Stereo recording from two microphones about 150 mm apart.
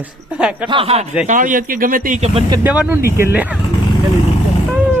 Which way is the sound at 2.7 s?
10° right (ahead or behind).